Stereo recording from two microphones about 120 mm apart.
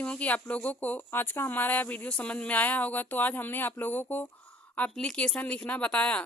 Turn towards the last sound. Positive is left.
turn(degrees=10)  # may be behind; listen again after turning